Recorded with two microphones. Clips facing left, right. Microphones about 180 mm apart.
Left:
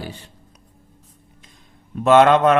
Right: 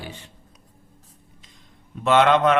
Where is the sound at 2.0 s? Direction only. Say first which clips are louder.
Left 4 dB; 45° left (ahead or behind).